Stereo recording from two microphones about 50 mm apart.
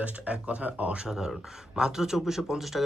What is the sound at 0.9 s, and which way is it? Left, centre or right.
Speech, centre.